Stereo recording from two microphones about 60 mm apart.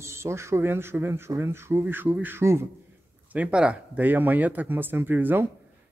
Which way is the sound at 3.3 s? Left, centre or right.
Right.